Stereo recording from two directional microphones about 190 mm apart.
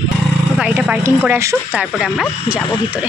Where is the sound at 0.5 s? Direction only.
5° right (ahead or behind).